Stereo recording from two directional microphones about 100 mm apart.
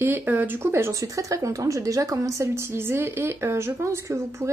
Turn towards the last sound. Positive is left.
turn(degrees=-30)  # may be behind; listen again after turning